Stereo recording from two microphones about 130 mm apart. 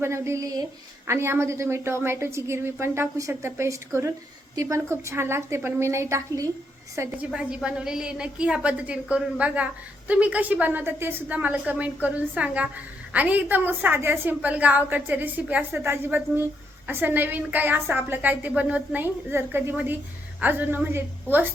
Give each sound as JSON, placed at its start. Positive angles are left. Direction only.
{"t": 0.0, "sound": "a woman's voice", "side_deg": -20}
{"t": 7.3, "sound": "a woman's voice", "side_deg": -5}